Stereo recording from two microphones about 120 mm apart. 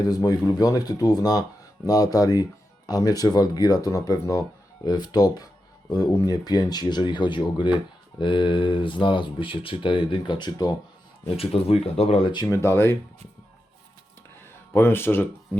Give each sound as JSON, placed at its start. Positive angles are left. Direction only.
{"t": 0.0, "sound": "speech", "side_deg": 30}
{"t": 11.3, "sound": "speech", "side_deg": 55}
{"t": 12.5, "sound": "speech", "side_deg": 20}
{"t": 14.7, "sound": "speech", "side_deg": 20}